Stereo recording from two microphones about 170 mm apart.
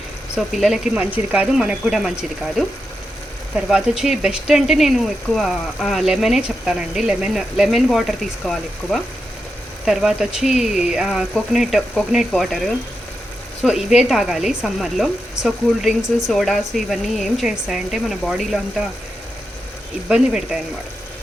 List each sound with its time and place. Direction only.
0.3 s speech: centre (ahead or behind)
3.5 s speech: 5° right (ahead or behind)
20.1 s speech: 5° right (ahead or behind)